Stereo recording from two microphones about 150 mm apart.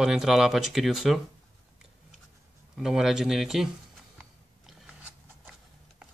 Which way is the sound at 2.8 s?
5° right (ahead or behind).